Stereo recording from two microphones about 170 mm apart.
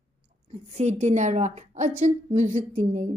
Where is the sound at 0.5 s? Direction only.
40° right (ahead or behind).